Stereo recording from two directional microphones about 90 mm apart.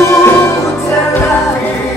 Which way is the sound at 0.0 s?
30° left (ahead or behind).